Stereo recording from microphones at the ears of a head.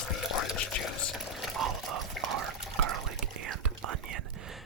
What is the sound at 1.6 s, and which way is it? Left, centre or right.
Whispering, right.